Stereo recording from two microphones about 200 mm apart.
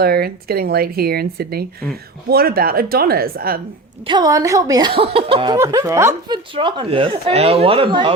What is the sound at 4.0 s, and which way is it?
A woman's voice, 25° right (ahead or behind).